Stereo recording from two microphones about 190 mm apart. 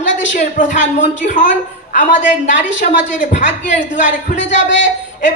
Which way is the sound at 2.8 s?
40° left (ahead or behind).